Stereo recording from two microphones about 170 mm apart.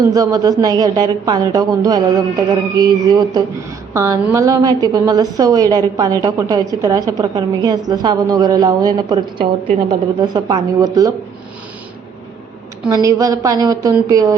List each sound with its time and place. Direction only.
0.0 s a woman's voice: 20° right (ahead or behind)
10.2 s a woman's voice: 25° right (ahead or behind)
12.9 s a woman's voice: 20° right (ahead or behind)